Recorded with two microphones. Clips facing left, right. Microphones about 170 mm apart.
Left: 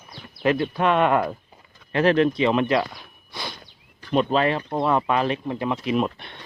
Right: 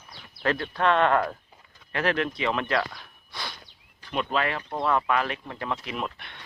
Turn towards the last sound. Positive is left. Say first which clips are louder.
# left 10 dB
turn(degrees=20)  # may be behind; listen again after turning